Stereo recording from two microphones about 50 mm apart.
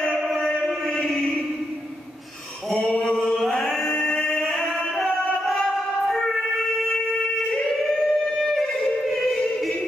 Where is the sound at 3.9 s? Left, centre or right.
Left.